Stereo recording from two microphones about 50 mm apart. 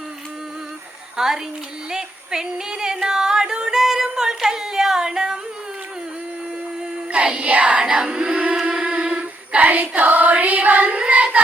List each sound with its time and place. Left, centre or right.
1.1 s a woman's voice: centre
1.9 s yodeling: centre
7.1 s music: right
8.5 s a sound: centre
9.6 s child singing: right